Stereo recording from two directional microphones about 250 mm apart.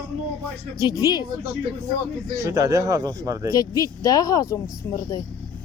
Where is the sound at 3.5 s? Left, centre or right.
Centre.